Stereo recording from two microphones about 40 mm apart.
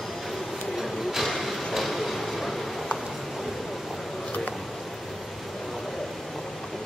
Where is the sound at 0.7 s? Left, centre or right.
Centre.